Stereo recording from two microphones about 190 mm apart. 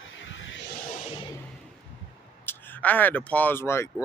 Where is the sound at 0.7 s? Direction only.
45° left (ahead or behind).